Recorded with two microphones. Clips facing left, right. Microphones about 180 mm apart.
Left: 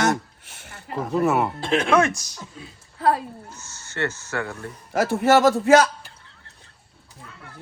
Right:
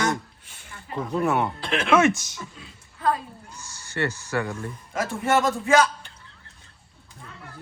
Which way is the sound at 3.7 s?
15° right (ahead or behind).